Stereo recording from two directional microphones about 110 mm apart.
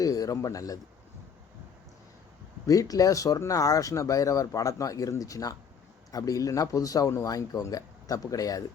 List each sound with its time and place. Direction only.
0.0 s speech: 35° left (ahead or behind)
2.6 s speech: 30° left (ahead or behind)